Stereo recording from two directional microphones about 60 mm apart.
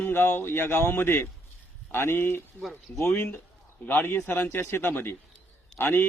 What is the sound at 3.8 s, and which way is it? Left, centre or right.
Speech, left.